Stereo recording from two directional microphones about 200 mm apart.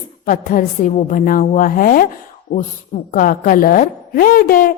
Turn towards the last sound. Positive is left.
turn(degrees=45)  # may be behind; listen again after turning